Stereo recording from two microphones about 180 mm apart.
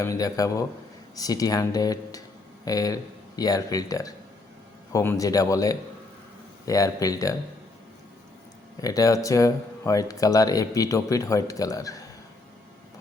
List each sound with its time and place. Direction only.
0.0 s speech: 20° left (ahead or behind)
8.8 s speech: 20° left (ahead or behind)